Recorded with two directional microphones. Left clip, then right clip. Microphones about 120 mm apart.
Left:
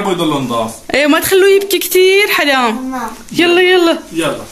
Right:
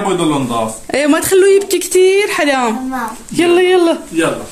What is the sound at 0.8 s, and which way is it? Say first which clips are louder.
Speech: left 3 dB; centre (ahead or behind).